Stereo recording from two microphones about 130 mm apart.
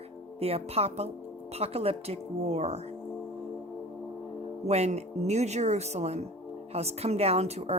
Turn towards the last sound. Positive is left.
turn(degrees=-55)  # may be behind; listen again after turning